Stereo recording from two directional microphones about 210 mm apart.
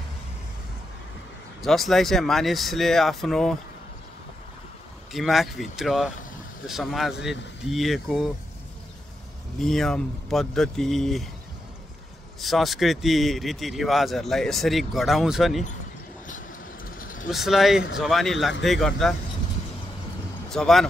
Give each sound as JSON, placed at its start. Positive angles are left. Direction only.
{"t": 1.6, "sound": "a man's voice", "side_deg": 0}
{"t": 5.1, "sound": "a man's voice", "side_deg": 0}
{"t": 9.6, "sound": "a man's voice", "side_deg": 0}
{"t": 12.4, "sound": "a man's voice", "side_deg": 0}
{"t": 17.0, "sound": "vehicle", "side_deg": 40}
{"t": 17.3, "sound": "a man's voice", "side_deg": 0}
{"t": 20.4, "sound": "speech", "side_deg": 0}